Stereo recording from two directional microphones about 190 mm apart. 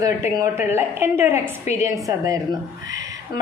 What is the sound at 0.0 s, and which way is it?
A woman's voice, 15° right (ahead or behind).